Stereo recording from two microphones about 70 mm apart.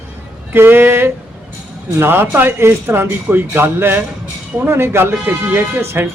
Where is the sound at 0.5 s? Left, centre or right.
Right.